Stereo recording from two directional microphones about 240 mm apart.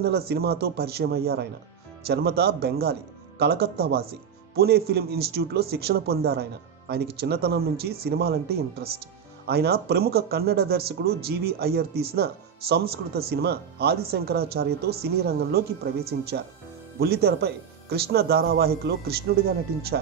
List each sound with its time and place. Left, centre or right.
0.0 s speech: right